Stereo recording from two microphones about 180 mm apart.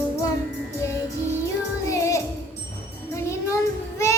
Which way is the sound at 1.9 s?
15° left (ahead or behind).